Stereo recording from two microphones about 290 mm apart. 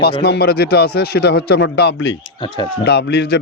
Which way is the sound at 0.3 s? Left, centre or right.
Left.